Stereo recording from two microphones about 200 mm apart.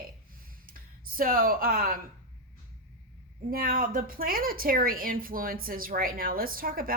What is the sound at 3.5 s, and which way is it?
A woman's voice, 45° right (ahead or behind).